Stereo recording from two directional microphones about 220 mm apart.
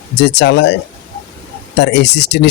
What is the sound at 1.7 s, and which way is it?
Speech, 50° left (ahead or behind).